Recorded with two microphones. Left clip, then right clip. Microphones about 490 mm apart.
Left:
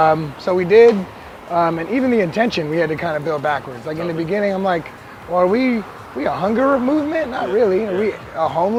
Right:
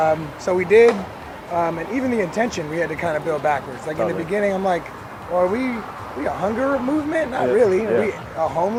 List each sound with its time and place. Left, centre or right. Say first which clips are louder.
0.0 s speech: left 4 dB; left